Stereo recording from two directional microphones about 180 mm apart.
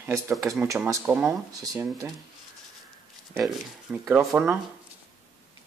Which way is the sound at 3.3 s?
5° right (ahead or behind).